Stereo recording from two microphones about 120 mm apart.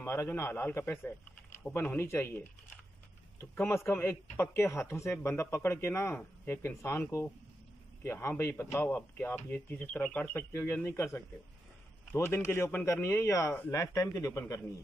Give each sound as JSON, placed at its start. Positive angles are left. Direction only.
{"t": 0.0, "sound": "a man's voice", "side_deg": 20}